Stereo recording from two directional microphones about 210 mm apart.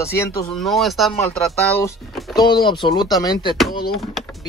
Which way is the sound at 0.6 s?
Centre (ahead or behind).